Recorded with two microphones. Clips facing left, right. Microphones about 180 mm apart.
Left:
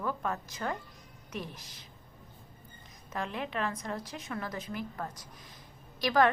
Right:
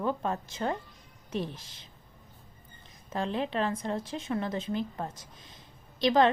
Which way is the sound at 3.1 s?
30° right (ahead or behind).